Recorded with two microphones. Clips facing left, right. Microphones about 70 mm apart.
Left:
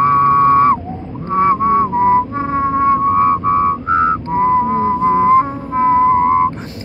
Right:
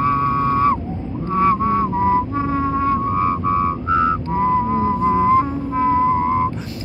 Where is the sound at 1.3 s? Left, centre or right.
Left.